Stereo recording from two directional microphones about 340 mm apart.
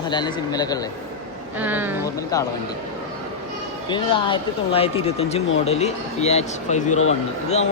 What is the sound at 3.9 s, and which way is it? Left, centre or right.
Speech, centre.